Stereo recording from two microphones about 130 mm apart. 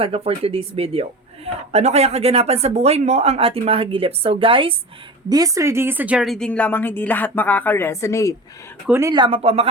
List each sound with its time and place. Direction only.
0.0 s speech: 50° right (ahead or behind)
5.3 s speech: 25° right (ahead or behind); by 8.4 s 25° left (ahead or behind)
8.9 s speech: 20° right (ahead or behind)
9.1 s speech: 35° right (ahead or behind)
9.4 s speech: 50° right (ahead or behind)